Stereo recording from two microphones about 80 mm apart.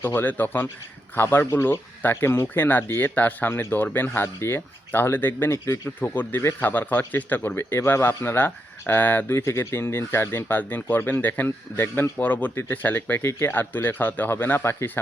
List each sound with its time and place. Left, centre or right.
0.0 s a man's voice: left